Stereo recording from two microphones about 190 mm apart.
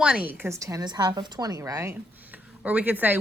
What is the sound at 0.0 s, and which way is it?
A woman's voice, 5° right (ahead or behind).